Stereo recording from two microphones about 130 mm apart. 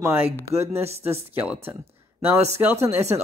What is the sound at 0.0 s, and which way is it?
Speech, 20° right (ahead or behind).